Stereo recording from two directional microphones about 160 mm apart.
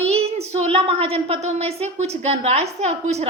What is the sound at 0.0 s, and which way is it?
Child singing, 40° right (ahead or behind).